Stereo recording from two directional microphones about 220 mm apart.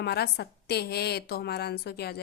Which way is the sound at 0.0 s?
50° left (ahead or behind).